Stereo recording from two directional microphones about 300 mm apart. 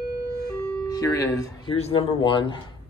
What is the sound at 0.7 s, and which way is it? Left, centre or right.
Speech, centre.